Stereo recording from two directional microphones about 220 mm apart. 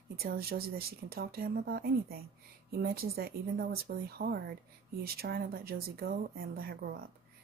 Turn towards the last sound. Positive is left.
turn(degrees=-45)  # may be behind; listen again after turning